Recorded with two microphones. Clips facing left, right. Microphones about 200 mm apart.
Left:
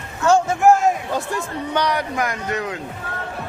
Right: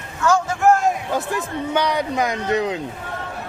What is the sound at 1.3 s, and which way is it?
A man's voice, 5° right (ahead or behind).